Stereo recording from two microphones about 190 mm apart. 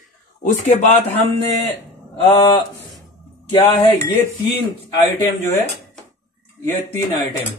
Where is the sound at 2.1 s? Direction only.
25° left (ahead or behind).